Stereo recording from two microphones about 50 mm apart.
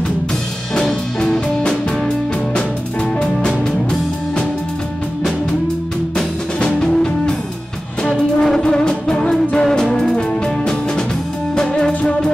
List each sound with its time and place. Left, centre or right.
0.7 s music: centre
6.1 s music: centre
12.0 s music: left